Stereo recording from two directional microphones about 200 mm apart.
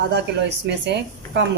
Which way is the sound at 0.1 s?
60° right (ahead or behind).